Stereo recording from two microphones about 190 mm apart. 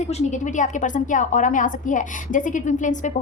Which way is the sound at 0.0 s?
35° left (ahead or behind).